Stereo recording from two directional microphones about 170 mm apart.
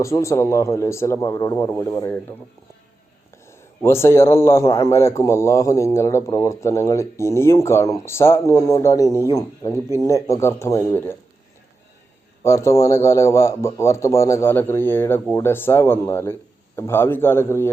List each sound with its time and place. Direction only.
0.0 s a man's voice: 15° left (ahead or behind)
3.3 s a man's voice: 15° left (ahead or behind)
12.4 s a man's voice: 15° left (ahead or behind)